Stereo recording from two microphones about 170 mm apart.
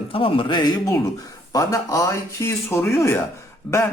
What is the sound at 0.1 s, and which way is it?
Speech, 30° left (ahead or behind).